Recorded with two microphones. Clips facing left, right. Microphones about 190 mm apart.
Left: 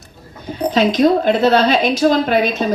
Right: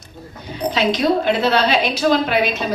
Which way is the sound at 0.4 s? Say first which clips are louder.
Left 4 dB; 45° left (ahead or behind).